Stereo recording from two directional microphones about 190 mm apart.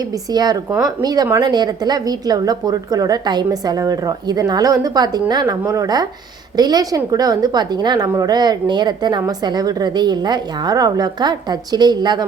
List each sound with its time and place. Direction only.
0.0 s a woman's voice: 20° right (ahead or behind)